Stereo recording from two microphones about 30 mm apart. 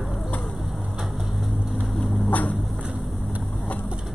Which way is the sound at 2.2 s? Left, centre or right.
Left.